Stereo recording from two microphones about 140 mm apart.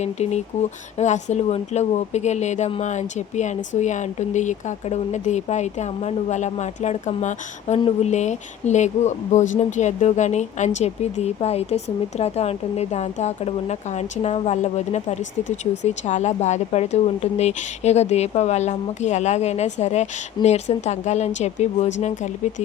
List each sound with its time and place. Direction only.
0.0 s speech: 55° left (ahead or behind)